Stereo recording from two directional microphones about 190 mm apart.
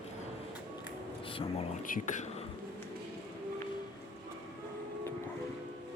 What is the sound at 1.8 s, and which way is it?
Speech, 45° left (ahead or behind).